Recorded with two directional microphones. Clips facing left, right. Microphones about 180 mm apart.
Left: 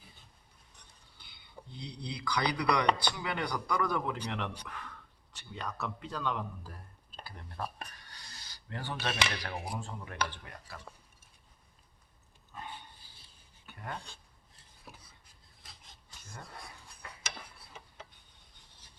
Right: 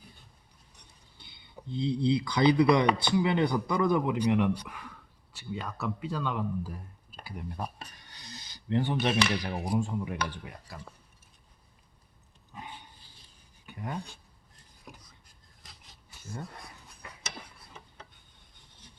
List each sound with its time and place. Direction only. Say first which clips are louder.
1.2 s speech: right 4 dB; 25° right (ahead or behind)
12.5 s dog: even; 15° right (ahead or behind)
13.7 s speech: right 5 dB; 15° right (ahead or behind)